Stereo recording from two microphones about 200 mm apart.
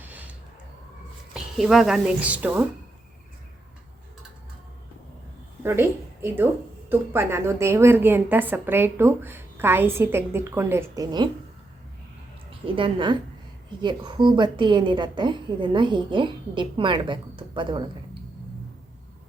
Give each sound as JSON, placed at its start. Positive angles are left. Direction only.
{"t": 0.0, "sound": "a sound", "side_deg": -10}
{"t": 1.3, "sound": "speech", "side_deg": 0}
{"t": 5.6, "sound": "a woman's voice", "side_deg": -10}
{"t": 12.5, "sound": "a woman's voice", "side_deg": -25}